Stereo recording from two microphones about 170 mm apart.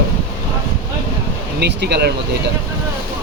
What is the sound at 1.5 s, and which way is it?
Speech, 80° right.